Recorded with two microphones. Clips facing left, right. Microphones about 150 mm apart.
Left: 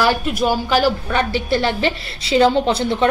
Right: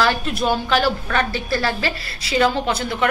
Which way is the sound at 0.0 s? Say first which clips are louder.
Left 2 dB; 15° left (ahead or behind).